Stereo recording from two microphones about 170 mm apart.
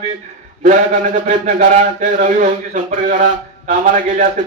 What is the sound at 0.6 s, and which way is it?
A man's voice, 45° right (ahead or behind).